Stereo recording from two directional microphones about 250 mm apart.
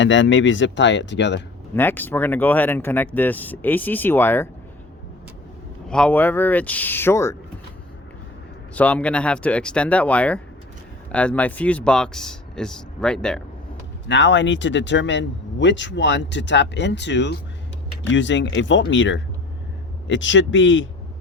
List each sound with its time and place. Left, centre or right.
0.0 s speech: left
1.7 s speech: centre
5.9 s speech: centre
8.7 s speech: centre
14.1 s speech: left